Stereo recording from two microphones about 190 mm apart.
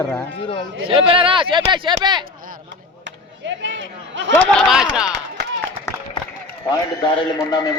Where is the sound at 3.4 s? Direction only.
75° right (ahead or behind).